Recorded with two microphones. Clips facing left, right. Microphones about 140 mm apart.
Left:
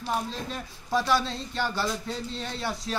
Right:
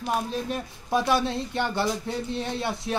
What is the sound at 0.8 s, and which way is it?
A man's voice, 20° right (ahead or behind).